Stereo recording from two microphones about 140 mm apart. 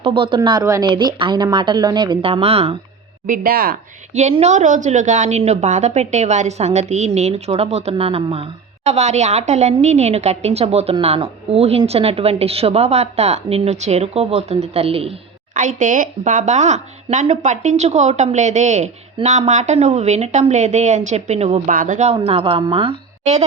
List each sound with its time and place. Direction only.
0.0 s a woman's voice: 40° right (ahead or behind)
3.2 s speech: 80° right
4.1 s a woman's voice: 50° right (ahead or behind)
15.5 s speech: 65° right (ahead or behind); by 21.6 s 50° right (ahead or behind)
21.7 s a woman's voice: 75° right (ahead or behind); by 23.0 s 40° right (ahead or behind)